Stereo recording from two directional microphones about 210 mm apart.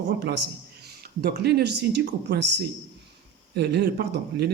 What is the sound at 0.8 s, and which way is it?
Speech, 45° right (ahead or behind).